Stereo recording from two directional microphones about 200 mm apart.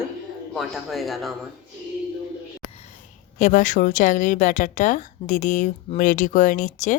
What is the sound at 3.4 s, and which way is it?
Speech, 40° left (ahead or behind).